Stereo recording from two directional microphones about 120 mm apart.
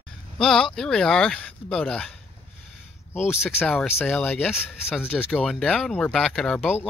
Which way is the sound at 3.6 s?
15° left (ahead or behind).